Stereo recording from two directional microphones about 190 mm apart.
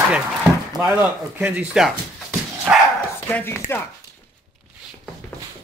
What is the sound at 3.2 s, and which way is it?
Speech, 10° left (ahead or behind).